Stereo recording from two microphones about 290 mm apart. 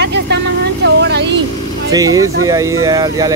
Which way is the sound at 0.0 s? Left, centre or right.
Right.